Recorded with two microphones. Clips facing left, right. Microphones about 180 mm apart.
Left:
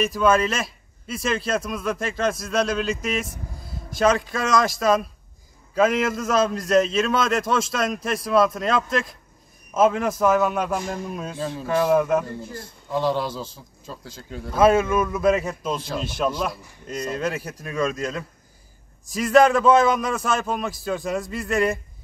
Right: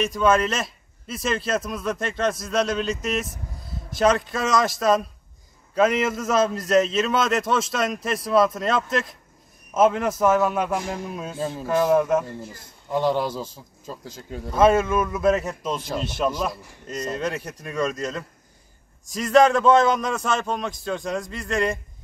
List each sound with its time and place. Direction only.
0.0 s a man's voice: centre (ahead or behind)
12.9 s a man's voice: 15° right (ahead or behind)
14.5 s a man's voice: centre (ahead or behind)